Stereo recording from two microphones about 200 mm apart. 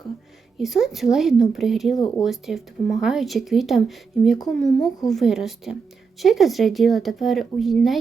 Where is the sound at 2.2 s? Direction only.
Centre (ahead or behind).